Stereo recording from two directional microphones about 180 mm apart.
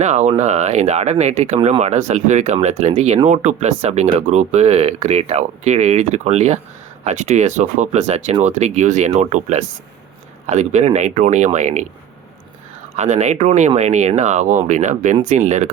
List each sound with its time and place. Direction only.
0.0 s speech: 40° right (ahead or behind)
13.0 s speech: 40° right (ahead or behind)